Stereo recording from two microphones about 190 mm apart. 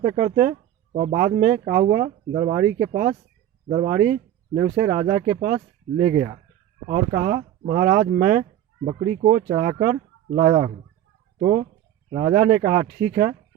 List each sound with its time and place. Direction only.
0.1 s speech: 35° right (ahead or behind)
2.3 s speech: 25° right (ahead or behind)
2.6 s speech: 45° right (ahead or behind)
3.7 s speech: 30° right (ahead or behind)
5.1 s speech: 45° right (ahead or behind)
6.8 s speech: 35° right (ahead or behind)
10.3 s speech: 30° right (ahead or behind)